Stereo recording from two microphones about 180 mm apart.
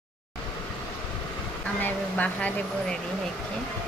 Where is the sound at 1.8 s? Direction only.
10° left (ahead or behind).